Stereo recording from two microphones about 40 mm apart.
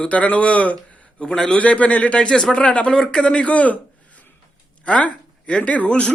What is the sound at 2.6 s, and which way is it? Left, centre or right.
Speech, left.